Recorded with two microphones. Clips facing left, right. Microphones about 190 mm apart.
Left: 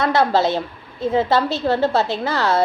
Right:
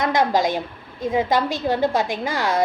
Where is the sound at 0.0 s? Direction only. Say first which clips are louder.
Left 2 dB; 15° right (ahead or behind).